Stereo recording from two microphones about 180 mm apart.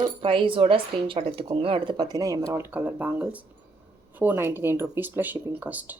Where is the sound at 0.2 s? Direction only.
30° right (ahead or behind); by 6.0 s 10° right (ahead or behind).